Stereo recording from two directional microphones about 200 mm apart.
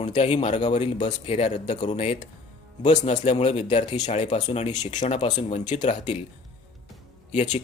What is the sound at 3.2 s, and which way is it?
A man's voice, 35° left (ahead or behind).